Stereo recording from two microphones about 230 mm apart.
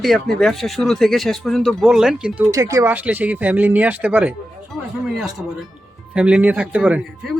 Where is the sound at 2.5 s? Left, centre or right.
Centre.